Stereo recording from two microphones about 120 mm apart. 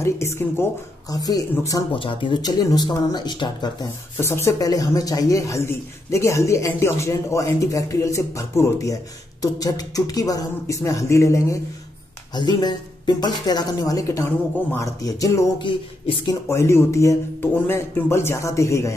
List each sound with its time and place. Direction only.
0.0 s a man's voice: 25° left (ahead or behind)
1.1 s speech: 30° left (ahead or behind)
2.0 s a sound: 45° left (ahead or behind)
2.4 s speech: 35° left (ahead or behind)
4.2 s a man's voice: 20° left (ahead or behind)
12.4 s a man's voice: 35° left (ahead or behind)
15.6 s a sound: 45° left (ahead or behind)
16.4 s a man's voice: 20° left (ahead or behind)